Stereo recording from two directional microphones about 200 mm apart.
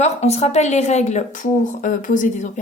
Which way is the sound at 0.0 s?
35° left (ahead or behind).